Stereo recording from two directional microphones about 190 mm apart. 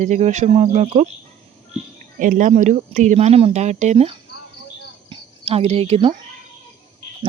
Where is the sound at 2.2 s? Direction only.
40° right (ahead or behind).